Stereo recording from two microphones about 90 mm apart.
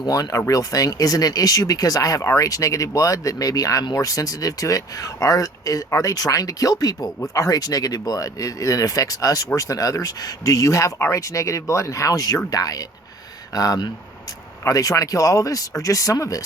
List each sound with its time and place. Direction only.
0.0 s speech: 45° left (ahead or behind)